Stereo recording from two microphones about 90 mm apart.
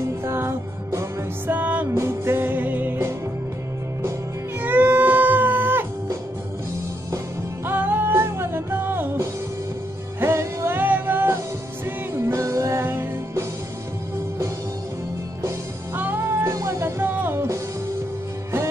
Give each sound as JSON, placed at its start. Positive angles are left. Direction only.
{"t": 0.2, "sound": "music", "side_deg": -30}
{"t": 1.5, "sound": "music", "side_deg": -15}
{"t": 2.0, "sound": "music", "side_deg": -30}
{"t": 4.6, "sound": "music", "side_deg": -20}
{"t": 7.6, "sound": "music", "side_deg": -20}
{"t": 12.1, "sound": "music", "side_deg": -35}
{"t": 16.0, "sound": "music", "side_deg": -20}
{"t": 16.5, "sound": "music", "side_deg": -35}
{"t": 17.0, "sound": "music", "side_deg": -25}